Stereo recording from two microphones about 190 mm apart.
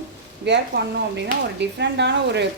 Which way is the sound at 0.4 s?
65° right (ahead or behind).